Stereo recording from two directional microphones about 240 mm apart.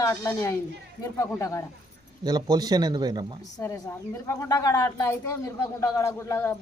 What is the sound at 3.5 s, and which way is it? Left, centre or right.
Speech, centre.